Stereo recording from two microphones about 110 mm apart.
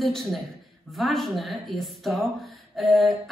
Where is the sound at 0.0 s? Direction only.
Centre (ahead or behind).